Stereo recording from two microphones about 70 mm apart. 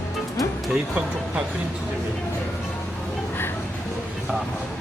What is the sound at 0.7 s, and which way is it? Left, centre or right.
Speech, centre.